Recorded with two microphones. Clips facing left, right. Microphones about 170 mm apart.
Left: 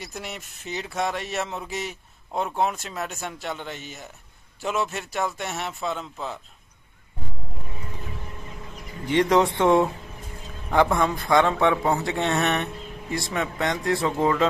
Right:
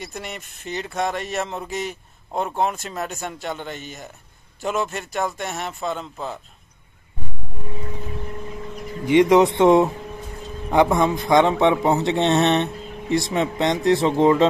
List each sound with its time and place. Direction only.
0.0 s speech: 5° left (ahead or behind)
9.0 s speech: 10° right (ahead or behind)